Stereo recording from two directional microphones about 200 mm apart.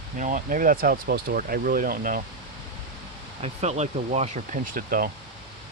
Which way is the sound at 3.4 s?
35° right (ahead or behind).